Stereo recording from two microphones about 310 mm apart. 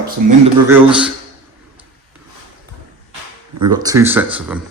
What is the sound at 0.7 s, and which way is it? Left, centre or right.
Speech, centre.